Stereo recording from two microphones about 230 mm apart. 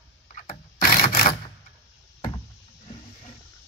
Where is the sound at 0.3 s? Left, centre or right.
Left.